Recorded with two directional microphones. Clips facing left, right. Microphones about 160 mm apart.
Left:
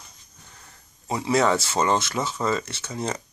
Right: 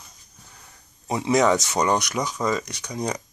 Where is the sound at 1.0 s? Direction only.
20° right (ahead or behind).